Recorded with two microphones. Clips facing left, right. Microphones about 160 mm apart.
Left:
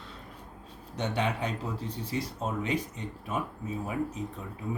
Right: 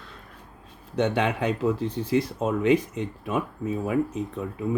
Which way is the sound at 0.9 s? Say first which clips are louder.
Right 7 dB; 60° right (ahead or behind).